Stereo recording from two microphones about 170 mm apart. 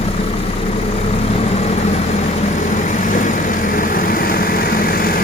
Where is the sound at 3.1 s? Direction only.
50° left (ahead or behind).